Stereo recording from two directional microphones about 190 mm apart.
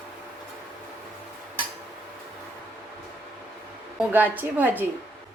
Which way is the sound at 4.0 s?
10° right (ahead or behind).